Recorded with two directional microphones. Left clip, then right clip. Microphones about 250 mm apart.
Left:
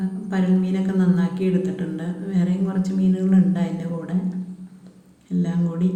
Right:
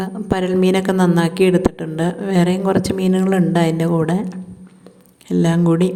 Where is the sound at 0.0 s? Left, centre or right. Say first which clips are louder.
Right 7 dB; right.